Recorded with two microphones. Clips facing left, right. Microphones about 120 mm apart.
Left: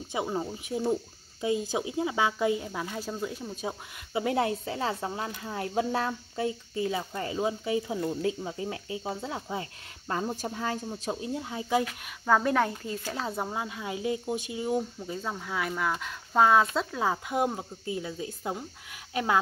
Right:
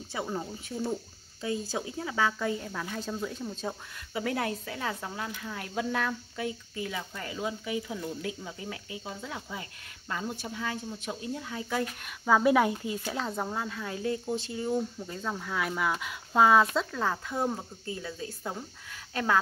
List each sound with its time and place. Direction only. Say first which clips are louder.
0.1 s speech: left 3 dB; 20° left (ahead or behind)
4.1 s speech: left 4 dB; 25° left (ahead or behind)
12.0 s speech: right 1 dB; 5° right (ahead or behind)
13.1 s speech: left 2 dB; 5° left (ahead or behind)
17.0 s speech: left 6 dB; 15° left (ahead or behind)